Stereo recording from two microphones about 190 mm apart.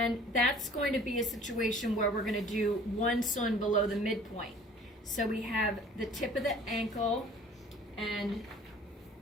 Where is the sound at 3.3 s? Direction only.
40° left (ahead or behind).